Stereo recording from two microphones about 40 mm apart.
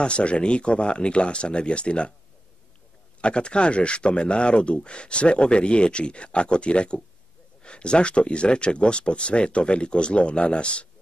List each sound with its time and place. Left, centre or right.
0.0 s speech: left
3.2 s speech: left